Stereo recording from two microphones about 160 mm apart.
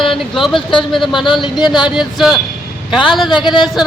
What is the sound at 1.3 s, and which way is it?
Speech, 30° left (ahead or behind).